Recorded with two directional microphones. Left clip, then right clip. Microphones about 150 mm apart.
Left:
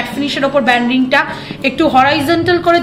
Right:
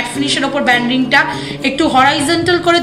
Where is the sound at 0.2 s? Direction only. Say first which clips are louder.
Left 2 dB; 35° left (ahead or behind).